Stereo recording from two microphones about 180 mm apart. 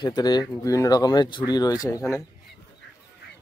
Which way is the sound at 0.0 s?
25° left (ahead or behind).